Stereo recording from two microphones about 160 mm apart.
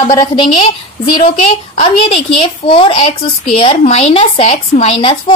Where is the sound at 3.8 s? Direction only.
45° left (ahead or behind).